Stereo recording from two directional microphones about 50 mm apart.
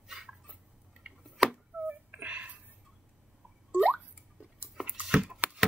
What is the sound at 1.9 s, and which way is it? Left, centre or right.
Whimper, right.